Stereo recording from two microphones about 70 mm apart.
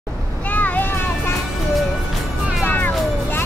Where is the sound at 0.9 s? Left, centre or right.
Left.